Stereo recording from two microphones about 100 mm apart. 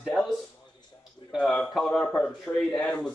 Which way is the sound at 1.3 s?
Centre (ahead or behind).